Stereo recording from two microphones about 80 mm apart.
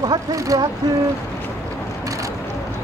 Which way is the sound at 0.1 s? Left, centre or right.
Right.